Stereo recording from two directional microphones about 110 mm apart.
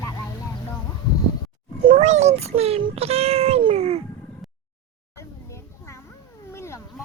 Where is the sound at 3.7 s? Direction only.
70° right (ahead or behind).